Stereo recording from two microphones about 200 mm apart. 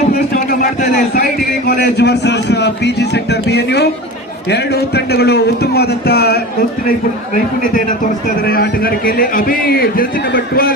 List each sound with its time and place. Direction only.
0.8 s a man's voice: 50° left (ahead or behind)